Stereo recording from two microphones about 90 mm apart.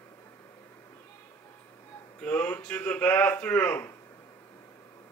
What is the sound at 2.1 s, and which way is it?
Speech, 20° left (ahead or behind).